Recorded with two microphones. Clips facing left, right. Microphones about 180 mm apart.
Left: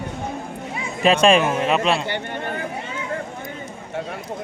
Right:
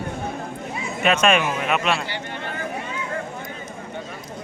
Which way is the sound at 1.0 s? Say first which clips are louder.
Left 4 dB; 30° left (ahead or behind).